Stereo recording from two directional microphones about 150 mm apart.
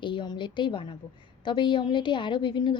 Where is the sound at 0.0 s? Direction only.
30° left (ahead or behind).